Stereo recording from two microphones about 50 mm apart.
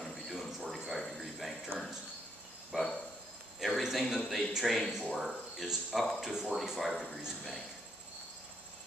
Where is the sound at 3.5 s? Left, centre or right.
Centre.